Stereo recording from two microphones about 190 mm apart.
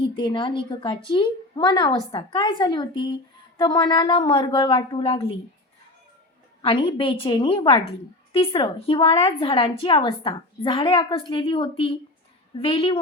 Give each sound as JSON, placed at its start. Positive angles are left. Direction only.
{"t": 0.2, "sound": "a woman's voice", "side_deg": 25}
{"t": 6.6, "sound": "a woman's voice", "side_deg": 25}